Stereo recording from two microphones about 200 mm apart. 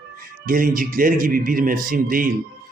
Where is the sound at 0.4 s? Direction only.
45° right (ahead or behind).